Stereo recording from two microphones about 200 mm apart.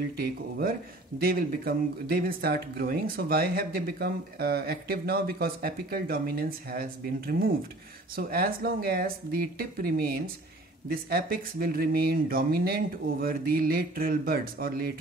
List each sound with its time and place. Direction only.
0.2 s speech: 50° right (ahead or behind)